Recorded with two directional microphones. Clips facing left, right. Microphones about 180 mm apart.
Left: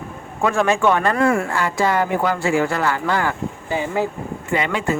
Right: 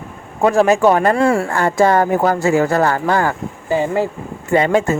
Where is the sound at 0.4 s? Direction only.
35° right (ahead or behind).